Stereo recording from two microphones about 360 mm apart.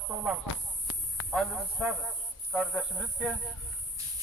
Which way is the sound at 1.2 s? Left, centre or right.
Centre.